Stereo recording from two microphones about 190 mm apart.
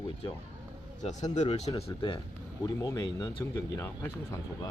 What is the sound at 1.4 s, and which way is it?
Speech, 35° left (ahead or behind).